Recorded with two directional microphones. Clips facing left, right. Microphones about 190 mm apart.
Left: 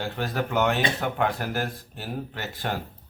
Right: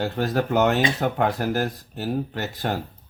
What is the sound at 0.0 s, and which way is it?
Speech, 40° right (ahead or behind).